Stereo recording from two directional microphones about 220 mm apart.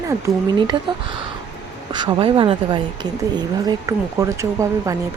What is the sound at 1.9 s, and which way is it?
Speech, 20° right (ahead or behind).